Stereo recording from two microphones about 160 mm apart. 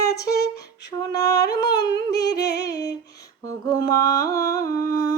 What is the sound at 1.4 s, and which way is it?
Humming, 25° left (ahead or behind).